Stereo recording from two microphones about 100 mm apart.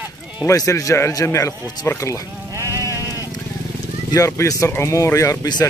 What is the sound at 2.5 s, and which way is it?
Sheep, 35° right (ahead or behind).